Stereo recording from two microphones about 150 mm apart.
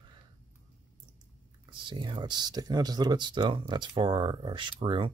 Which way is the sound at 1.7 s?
30° right (ahead or behind).